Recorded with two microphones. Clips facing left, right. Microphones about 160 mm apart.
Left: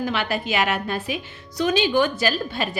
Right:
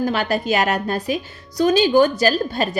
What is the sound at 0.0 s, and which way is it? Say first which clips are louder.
A woman's voice: right 4 dB; 40° right (ahead or behind).